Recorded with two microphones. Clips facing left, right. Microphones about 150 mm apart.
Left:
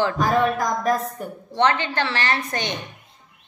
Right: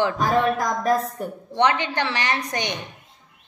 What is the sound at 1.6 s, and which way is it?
A woman's voice, 15° right (ahead or behind).